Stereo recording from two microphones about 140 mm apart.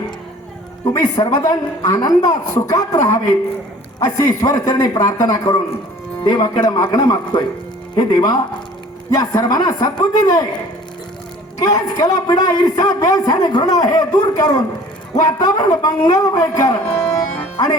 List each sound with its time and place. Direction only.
0.9 s a man's voice: 25° left (ahead or behind)
11.6 s a man's voice: 25° left (ahead or behind)